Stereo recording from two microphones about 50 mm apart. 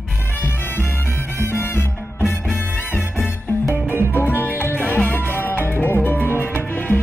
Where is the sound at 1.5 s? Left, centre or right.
Left.